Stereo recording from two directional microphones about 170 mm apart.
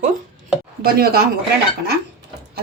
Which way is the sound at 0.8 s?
60° right (ahead or behind).